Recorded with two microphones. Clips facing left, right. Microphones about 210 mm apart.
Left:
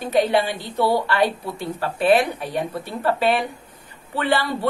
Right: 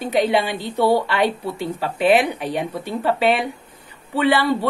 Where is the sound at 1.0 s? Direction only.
15° right (ahead or behind).